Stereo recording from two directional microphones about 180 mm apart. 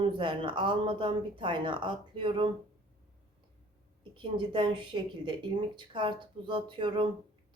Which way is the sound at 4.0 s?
25° right (ahead or behind).